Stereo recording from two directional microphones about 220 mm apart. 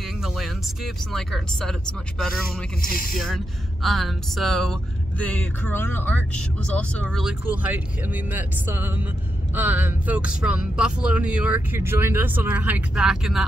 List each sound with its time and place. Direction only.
0.0 s speech: centre (ahead or behind)
2.8 s speech: 40° left (ahead or behind)
3.3 s speech: centre (ahead or behind)